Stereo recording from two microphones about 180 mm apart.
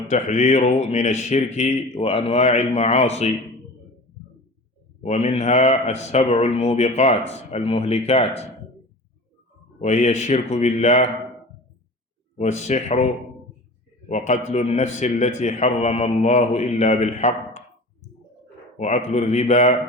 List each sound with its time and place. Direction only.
0.1 s a man's voice: 40° left (ahead or behind)
5.0 s a man's voice: 35° left (ahead or behind)
9.8 s a man's voice: 40° left (ahead or behind)
12.4 s a man's voice: 40° left (ahead or behind)
14.1 s a man's voice: 40° left (ahead or behind)
18.8 s a man's voice: 40° left (ahead or behind)